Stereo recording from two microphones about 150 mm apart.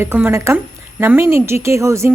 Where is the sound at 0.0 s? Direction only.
15° right (ahead or behind).